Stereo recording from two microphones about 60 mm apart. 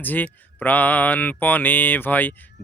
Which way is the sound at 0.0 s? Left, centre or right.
Left.